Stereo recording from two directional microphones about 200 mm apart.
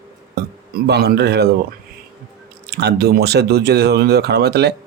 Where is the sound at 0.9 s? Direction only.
55° right (ahead or behind).